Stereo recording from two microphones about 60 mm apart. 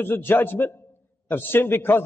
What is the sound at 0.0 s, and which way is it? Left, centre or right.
A man's voice, left.